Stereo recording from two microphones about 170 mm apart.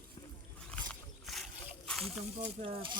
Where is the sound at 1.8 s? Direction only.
5° left (ahead or behind).